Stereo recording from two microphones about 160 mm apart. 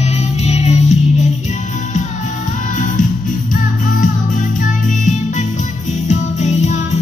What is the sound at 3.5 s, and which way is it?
Music, 55° left (ahead or behind).